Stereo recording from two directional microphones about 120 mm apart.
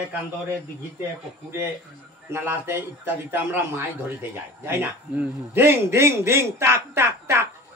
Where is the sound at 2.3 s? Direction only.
20° right (ahead or behind).